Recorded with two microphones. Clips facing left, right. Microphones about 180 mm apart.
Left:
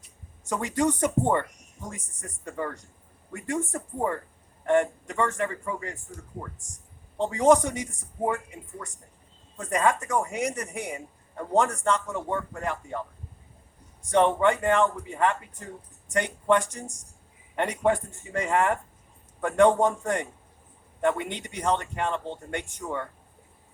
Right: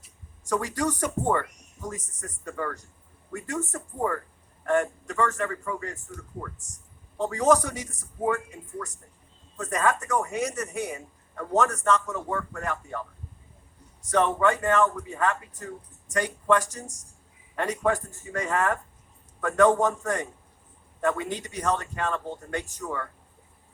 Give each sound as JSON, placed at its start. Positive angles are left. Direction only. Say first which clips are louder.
{"t": 0.4, "sound": "a man's voice", "louder": "left 1 dB", "side_deg": 25}
{"t": 7.2, "sound": "a man's voice", "louder": "left 2 dB", "side_deg": 25}
{"t": 9.6, "sound": "speech", "louder": "left 1 dB", "side_deg": 15}
{"t": 10.8, "sound": "a man's voice", "louder": "right 2 dB", "side_deg": 30}
{"t": 14.1, "sound": "a man's voice", "louder": "left 2 dB", "side_deg": 25}